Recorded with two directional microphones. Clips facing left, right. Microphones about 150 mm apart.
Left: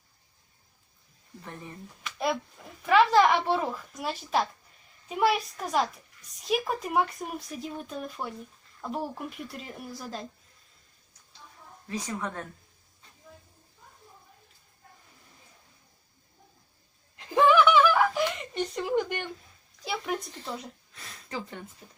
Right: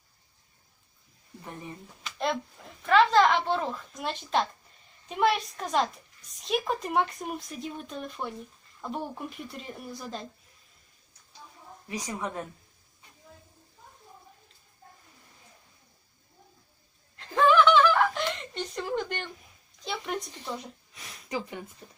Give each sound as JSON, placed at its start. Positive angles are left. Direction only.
{"t": 2.1, "sound": "a woman's voice", "side_deg": 5}
{"t": 11.9, "sound": "a woman's voice", "side_deg": -15}
{"t": 17.2, "sound": "a sound", "side_deg": 15}
{"t": 19.8, "sound": "speech", "side_deg": 5}
{"t": 20.3, "sound": "a woman's voice", "side_deg": -15}